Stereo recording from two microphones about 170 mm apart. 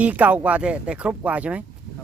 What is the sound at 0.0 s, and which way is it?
Speech, 10° right (ahead or behind).